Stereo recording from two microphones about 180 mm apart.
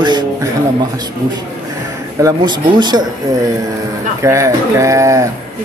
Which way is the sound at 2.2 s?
25° right (ahead or behind).